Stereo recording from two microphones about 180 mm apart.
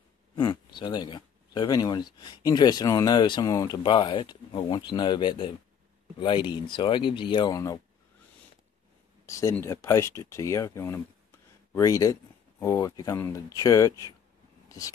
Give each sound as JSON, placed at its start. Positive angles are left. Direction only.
{"t": 0.4, "sound": "speech", "side_deg": 25}
{"t": 9.2, "sound": "speech", "side_deg": 15}